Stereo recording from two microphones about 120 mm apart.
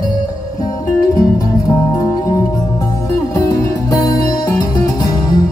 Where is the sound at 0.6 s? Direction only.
30° left (ahead or behind).